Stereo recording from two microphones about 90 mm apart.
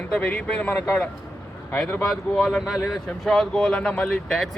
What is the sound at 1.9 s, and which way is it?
Speech, 15° left (ahead or behind).